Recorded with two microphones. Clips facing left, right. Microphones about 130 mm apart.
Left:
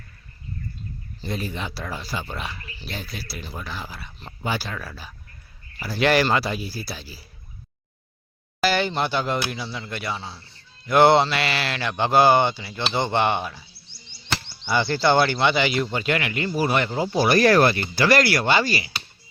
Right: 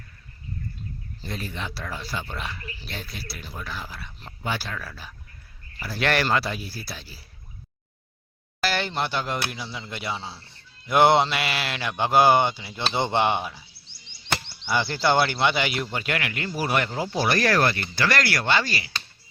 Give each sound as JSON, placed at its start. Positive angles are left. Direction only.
{"t": 1.2, "sound": "speech", "side_deg": 5}
{"t": 2.6, "sound": "dog", "side_deg": 25}
{"t": 2.8, "sound": "speech", "side_deg": 0}
{"t": 8.6, "sound": "a man's voice", "side_deg": 0}
{"t": 10.8, "sound": "speech", "side_deg": -10}
{"t": 14.1, "sound": "speech", "side_deg": 0}
{"t": 17.1, "sound": "speech", "side_deg": 10}